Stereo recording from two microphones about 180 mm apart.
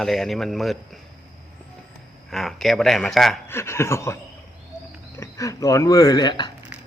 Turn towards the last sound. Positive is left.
turn(degrees=25)  # may be behind; listen again after turning